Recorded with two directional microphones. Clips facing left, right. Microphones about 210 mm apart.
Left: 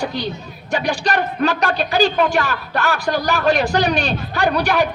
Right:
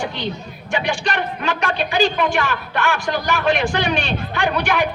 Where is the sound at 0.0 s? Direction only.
40° left (ahead or behind).